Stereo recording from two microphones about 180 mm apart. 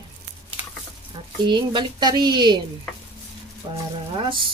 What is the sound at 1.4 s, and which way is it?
Speech, 25° right (ahead or behind).